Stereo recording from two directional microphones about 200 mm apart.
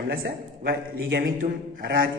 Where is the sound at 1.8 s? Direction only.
50° right (ahead or behind).